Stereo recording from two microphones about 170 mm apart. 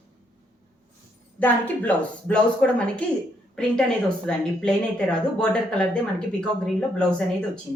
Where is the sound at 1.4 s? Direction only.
10° left (ahead or behind).